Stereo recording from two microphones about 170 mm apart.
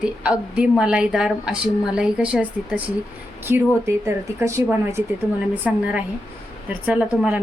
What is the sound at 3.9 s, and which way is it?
A woman's voice, 15° right (ahead or behind).